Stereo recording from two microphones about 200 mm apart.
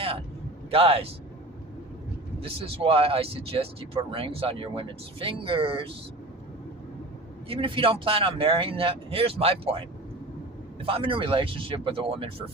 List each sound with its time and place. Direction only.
0.7 s speech: 30° right (ahead or behind)
2.4 s speech: 25° right (ahead or behind)
7.4 s speech: 25° right (ahead or behind)